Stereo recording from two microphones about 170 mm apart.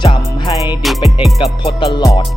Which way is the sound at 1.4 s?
25° left (ahead or behind).